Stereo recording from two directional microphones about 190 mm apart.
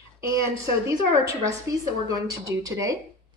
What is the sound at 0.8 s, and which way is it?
A woman's voice, 15° right (ahead or behind).